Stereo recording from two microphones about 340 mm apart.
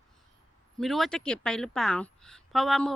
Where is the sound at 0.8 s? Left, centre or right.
Centre.